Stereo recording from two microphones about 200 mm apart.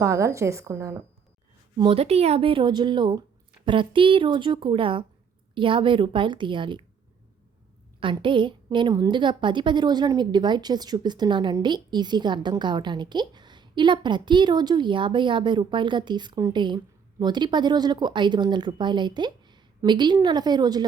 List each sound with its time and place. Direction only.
0.0 s a woman's voice: 15° right (ahead or behind)
1.8 s a woman's voice: 30° right (ahead or behind)
8.0 s a woman's voice: 25° right (ahead or behind)